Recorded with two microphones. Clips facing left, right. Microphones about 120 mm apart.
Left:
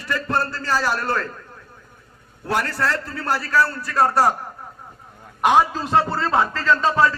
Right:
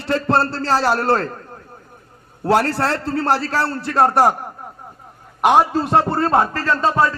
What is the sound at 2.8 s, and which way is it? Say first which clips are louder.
A man's voice: right 4 dB; 70° right (ahead or behind).